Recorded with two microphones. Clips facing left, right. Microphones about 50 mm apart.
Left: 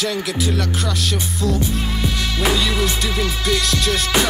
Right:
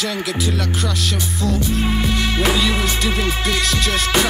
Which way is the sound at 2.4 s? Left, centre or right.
Centre.